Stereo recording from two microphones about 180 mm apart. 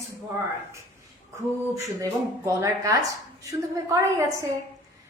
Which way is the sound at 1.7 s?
15° right (ahead or behind).